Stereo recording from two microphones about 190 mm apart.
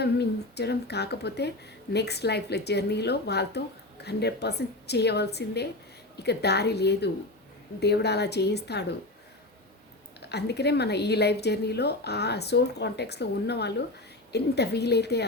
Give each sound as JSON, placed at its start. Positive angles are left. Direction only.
{"t": 0.0, "sound": "speech", "side_deg": 60}
{"t": 10.2, "sound": "speech", "side_deg": 60}